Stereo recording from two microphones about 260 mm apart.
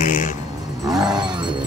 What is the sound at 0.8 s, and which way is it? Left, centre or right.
Roaring cats, centre.